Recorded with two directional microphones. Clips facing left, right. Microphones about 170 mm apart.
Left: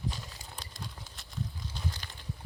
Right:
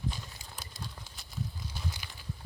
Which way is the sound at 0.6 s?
5° right (ahead or behind).